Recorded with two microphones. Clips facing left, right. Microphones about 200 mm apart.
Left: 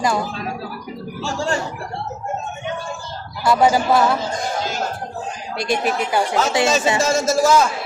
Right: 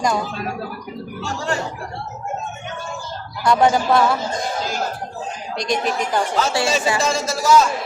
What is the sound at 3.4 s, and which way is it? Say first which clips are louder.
Speech: even; 5° left (ahead or behind).